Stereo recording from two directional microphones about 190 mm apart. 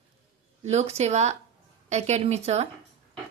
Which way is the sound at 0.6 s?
35° right (ahead or behind).